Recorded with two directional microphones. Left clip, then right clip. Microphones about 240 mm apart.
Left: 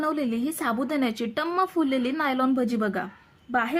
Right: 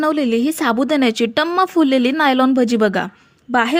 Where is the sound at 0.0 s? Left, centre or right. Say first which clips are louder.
Right 10 dB; right.